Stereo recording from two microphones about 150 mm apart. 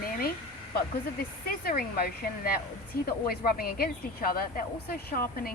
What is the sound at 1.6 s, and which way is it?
Speech, 85° left.